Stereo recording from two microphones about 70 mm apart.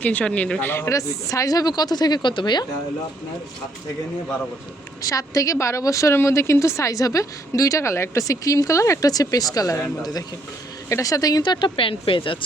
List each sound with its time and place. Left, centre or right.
0.0 s a man's voice: left
0.6 s speech: left
0.9 s speech: left
5.0 s a woman's voice: left
10.8 s speech: left